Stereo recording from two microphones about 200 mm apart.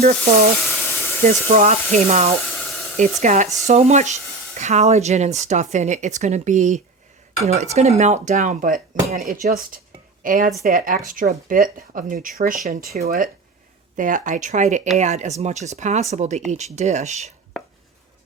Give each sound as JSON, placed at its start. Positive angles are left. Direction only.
{"t": 0.0, "sound": "speech", "side_deg": -35}
{"t": 0.6, "sound": "sizzle", "side_deg": 10}
{"t": 1.3, "sound": "speech", "side_deg": -35}
{"t": 2.4, "sound": "a sound", "side_deg": 5}
{"t": 3.0, "sound": "speech", "side_deg": -35}